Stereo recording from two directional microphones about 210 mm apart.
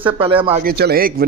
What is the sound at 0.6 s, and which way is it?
Speech, 45° right (ahead or behind).